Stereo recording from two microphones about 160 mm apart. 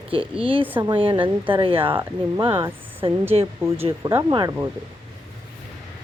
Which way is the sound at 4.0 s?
20° right (ahead or behind).